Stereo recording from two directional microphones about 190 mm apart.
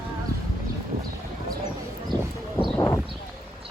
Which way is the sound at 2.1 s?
20° right (ahead or behind).